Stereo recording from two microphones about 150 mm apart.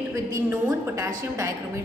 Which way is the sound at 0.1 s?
20° right (ahead or behind).